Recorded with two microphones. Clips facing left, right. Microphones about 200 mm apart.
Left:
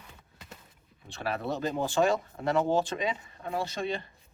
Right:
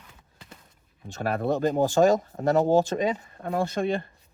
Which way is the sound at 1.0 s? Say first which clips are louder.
Right 6 dB; 45° right (ahead or behind).